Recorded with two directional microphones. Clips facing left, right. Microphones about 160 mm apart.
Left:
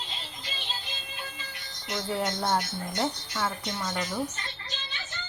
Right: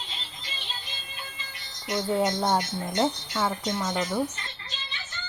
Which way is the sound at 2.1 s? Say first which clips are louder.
Right 3 dB; 15° right (ahead or behind).